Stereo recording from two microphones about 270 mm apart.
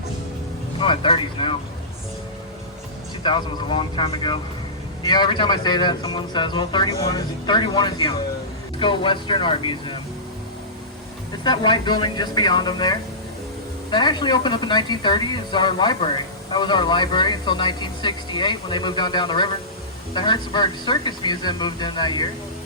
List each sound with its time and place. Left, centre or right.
0.8 s speech: centre
3.2 s a woman's voice: centre
11.3 s a woman's voice: centre